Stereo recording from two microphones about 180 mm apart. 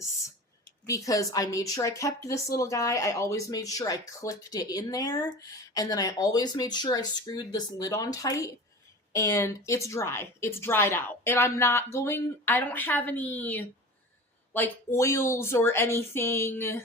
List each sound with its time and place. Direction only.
0.9 s a woman's voice: 20° left (ahead or behind)